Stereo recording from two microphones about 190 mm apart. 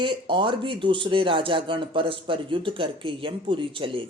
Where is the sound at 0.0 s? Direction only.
25° right (ahead or behind).